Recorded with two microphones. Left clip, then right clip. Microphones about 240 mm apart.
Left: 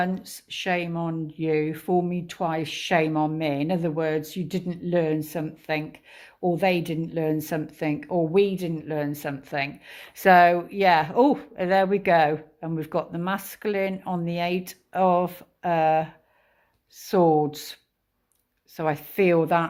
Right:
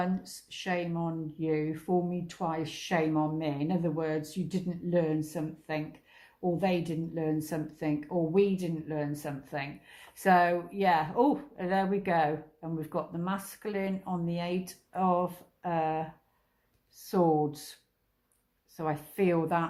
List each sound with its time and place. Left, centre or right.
0.0 s speech: left
17.1 s speech: left
18.8 s speech: left